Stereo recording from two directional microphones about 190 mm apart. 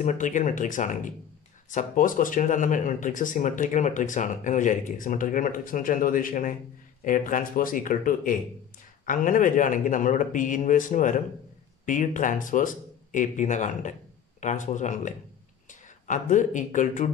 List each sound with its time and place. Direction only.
0.0 s speech: 40° left (ahead or behind)